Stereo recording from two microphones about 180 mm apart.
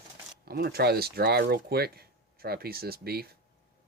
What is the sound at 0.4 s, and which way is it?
Speech, 60° right (ahead or behind).